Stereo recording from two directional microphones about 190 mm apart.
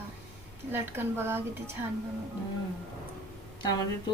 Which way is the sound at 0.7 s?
10° right (ahead or behind).